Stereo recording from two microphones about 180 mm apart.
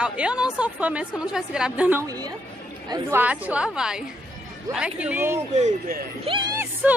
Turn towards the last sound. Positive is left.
turn(degrees=-5)  # may be behind; listen again after turning